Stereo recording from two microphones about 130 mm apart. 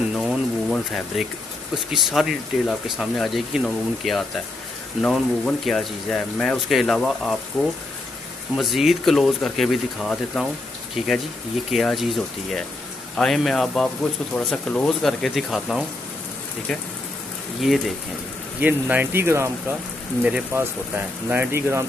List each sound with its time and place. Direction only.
0.1 s a sound: centre (ahead or behind)
1.9 s speech: centre (ahead or behind)
13.1 s speech: 5° left (ahead or behind)
17.6 s speech: centre (ahead or behind)
18.6 s speech: 15° right (ahead or behind)